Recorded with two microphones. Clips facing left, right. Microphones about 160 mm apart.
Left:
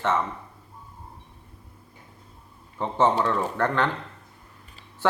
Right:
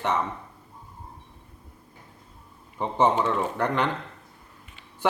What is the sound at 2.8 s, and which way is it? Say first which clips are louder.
Speech: even; 15° right (ahead or behind).